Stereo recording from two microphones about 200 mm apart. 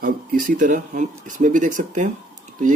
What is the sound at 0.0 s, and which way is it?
Speech, 45° right (ahead or behind).